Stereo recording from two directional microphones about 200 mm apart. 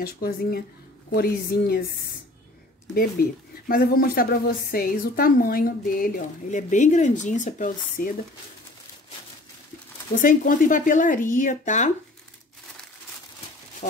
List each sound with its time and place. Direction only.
0.0 s speech: 50° left (ahead or behind)
2.9 s speech: 50° left (ahead or behind)
10.1 s speech: 40° left (ahead or behind)